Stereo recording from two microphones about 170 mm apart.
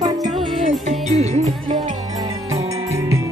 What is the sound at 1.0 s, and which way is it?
Music, 40° right (ahead or behind).